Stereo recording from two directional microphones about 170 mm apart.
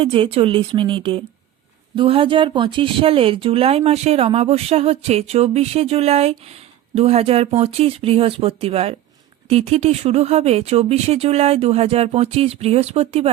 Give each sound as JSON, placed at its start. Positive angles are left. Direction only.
{"t": 0.0, "sound": "speech", "side_deg": -30}